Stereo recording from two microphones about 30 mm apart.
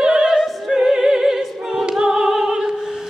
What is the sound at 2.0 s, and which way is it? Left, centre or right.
Music, right.